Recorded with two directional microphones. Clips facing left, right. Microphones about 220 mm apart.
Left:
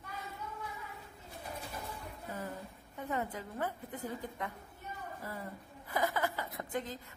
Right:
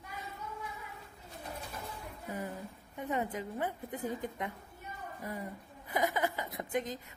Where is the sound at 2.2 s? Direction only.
15° right (ahead or behind).